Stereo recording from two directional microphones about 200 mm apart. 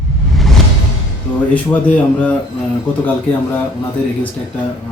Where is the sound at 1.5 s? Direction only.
5° left (ahead or behind).